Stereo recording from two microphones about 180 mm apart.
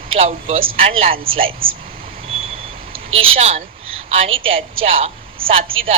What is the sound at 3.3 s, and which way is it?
A man's voice, 35° right (ahead or behind).